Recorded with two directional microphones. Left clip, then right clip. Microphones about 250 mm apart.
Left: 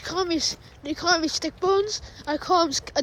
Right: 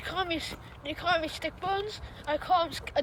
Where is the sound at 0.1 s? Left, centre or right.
Centre.